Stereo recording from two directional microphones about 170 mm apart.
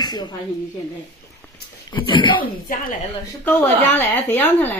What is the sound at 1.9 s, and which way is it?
Speech, 30° left (ahead or behind).